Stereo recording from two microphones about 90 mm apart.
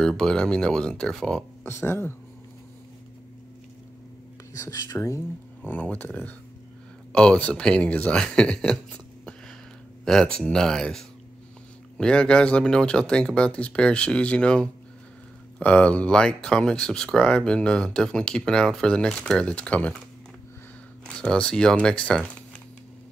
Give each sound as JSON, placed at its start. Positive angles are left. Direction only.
{"t": 0.2, "sound": "speech", "side_deg": 10}
{"t": 1.6, "sound": "speech", "side_deg": 30}
{"t": 4.6, "sound": "speech", "side_deg": 40}
{"t": 5.6, "sound": "speech", "side_deg": 20}
{"t": 21.1, "sound": "speech", "side_deg": 10}